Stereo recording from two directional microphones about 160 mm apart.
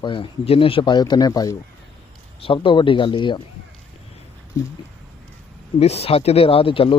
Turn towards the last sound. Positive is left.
turn(degrees=35)  # may be behind; listen again after turning